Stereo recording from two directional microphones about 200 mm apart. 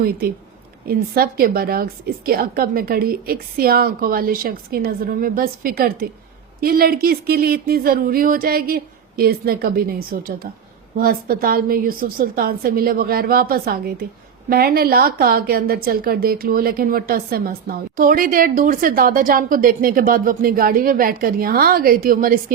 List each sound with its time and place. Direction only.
0.9 s a woman's voice: 50° right (ahead or behind)